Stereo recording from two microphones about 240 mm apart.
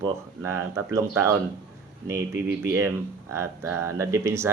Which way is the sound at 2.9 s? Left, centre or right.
Centre.